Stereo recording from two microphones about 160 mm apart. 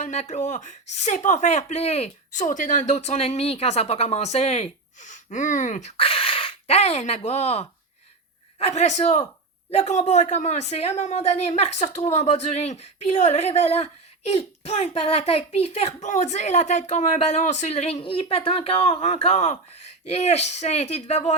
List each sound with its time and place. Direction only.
0.0 s speech: 45° left (ahead or behind)
6.0 s speech: 35° left (ahead or behind)